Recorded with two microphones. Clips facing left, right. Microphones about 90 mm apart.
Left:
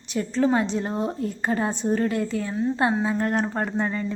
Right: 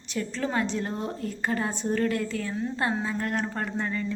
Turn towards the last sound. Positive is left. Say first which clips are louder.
# left 4 dB
turn(degrees=30)  # may be behind; listen again after turning